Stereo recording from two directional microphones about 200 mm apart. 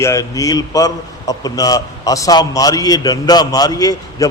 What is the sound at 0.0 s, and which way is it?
A man's voice, 15° left (ahead or behind).